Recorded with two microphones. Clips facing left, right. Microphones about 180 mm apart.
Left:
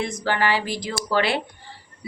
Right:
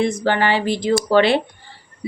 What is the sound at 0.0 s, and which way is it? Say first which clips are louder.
Speech: right 5 dB; 25° right (ahead or behind).